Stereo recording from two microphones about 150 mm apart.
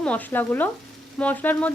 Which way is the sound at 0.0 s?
10° left (ahead or behind).